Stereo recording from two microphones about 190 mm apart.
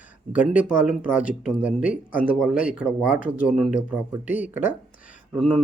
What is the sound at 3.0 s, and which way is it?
Speech, 45° left (ahead or behind).